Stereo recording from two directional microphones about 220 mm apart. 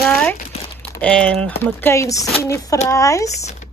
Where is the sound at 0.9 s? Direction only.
5° left (ahead or behind).